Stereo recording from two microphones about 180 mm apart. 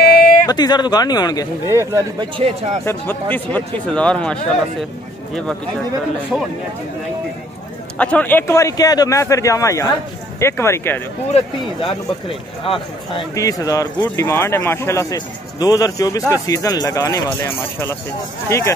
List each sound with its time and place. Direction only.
0.0 s a sound: 55° left (ahead or behind)
0.5 s speech: 20° left (ahead or behind)
1.7 s speech: 15° right (ahead or behind)
2.3 s speech: 30° right (ahead or behind)
2.8 s speech: 15° left (ahead or behind)
8.0 s speech: 10° left (ahead or behind)
11.3 s speech: 30° left (ahead or behind)
13.1 s speech: 20° left (ahead or behind)